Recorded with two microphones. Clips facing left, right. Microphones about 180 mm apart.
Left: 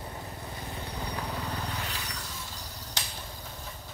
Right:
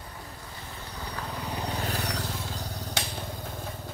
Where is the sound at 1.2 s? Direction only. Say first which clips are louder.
Left 1 dB; centre (ahead or behind).